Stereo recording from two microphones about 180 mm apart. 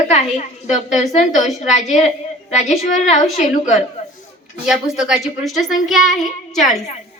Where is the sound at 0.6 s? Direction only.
Centre (ahead or behind).